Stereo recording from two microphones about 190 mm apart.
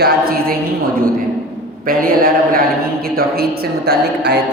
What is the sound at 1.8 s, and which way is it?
Speech, 50° right (ahead or behind).